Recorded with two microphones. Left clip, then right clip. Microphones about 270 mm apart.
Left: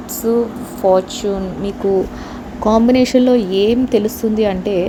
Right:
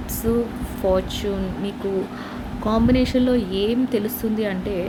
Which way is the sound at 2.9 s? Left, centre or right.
Left.